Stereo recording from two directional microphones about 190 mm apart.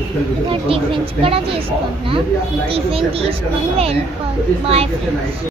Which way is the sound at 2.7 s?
30° right (ahead or behind).